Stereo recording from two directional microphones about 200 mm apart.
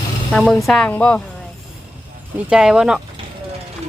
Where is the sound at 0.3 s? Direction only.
5° left (ahead or behind).